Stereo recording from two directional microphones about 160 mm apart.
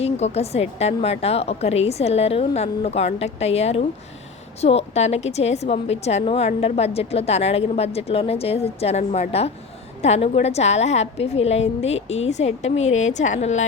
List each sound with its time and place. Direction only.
0.0 s a woman's voice: 40° left (ahead or behind)